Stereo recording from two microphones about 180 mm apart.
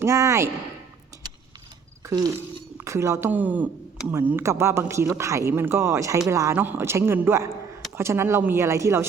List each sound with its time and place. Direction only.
0.0 s speech: 15° right (ahead or behind)
2.0 s a sound: 20° right (ahead or behind)
2.8 s speech: 15° right (ahead or behind)